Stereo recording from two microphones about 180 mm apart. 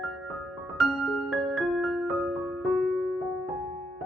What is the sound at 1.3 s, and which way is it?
Music, centre (ahead or behind).